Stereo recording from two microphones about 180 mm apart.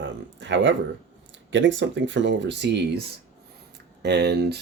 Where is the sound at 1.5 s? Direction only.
90° right; by 3.0 s 70° right (ahead or behind).